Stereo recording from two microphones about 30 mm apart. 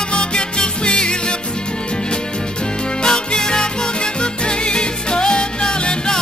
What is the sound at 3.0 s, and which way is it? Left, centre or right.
Music, left.